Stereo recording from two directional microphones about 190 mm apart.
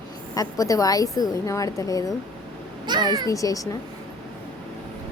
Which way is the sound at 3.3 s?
15° left (ahead or behind).